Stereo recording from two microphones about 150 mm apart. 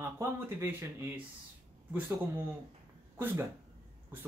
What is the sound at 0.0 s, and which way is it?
Speech, 20° right (ahead or behind).